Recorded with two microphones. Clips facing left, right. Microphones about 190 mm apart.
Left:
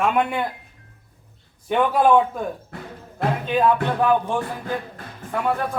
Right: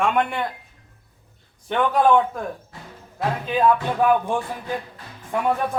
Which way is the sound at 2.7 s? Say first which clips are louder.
Left 6 dB; 60° left (ahead or behind).